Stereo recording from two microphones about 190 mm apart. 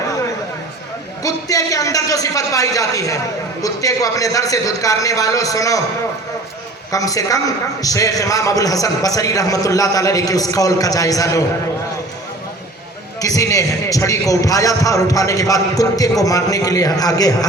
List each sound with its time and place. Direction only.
1.2 s a man's voice: 20° left (ahead or behind)
6.9 s a man's voice: 20° left (ahead or behind)
13.2 s a man's voice: 15° left (ahead or behind)